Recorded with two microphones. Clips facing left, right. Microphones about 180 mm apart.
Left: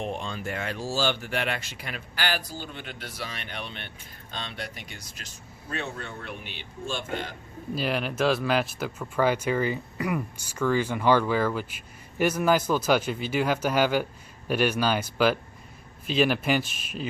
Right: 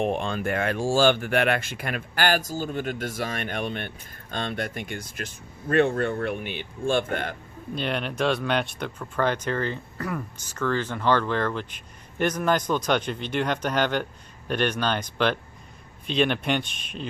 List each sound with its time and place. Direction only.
0.0 s speech: 60° right (ahead or behind)
7.8 s speech: 5° left (ahead or behind)